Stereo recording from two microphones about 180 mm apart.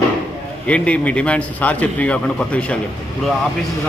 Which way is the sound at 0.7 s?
5° left (ahead or behind).